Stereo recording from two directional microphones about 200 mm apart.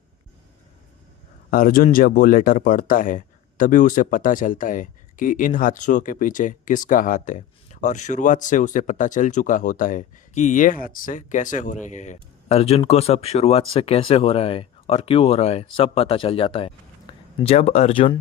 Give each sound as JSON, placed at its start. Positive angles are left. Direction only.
{"t": 1.5, "sound": "speech", "side_deg": 45}
{"t": 17.1, "sound": "a sound", "side_deg": 20}
{"t": 17.4, "sound": "speech", "side_deg": 30}